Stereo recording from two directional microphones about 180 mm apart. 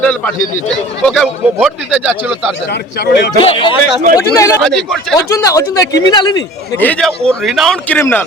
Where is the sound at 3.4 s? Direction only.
30° left (ahead or behind).